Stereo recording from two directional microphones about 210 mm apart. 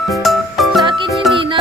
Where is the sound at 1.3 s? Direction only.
25° right (ahead or behind).